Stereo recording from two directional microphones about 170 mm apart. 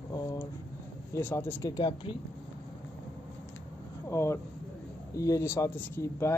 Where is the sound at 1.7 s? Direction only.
30° left (ahead or behind).